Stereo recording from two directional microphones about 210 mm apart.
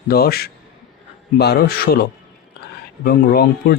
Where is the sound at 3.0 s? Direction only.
45° left (ahead or behind).